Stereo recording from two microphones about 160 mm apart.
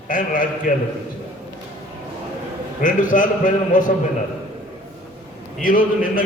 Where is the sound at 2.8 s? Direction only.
55° left (ahead or behind).